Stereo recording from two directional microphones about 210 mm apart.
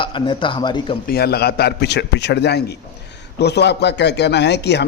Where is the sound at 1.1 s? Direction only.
50° left (ahead or behind).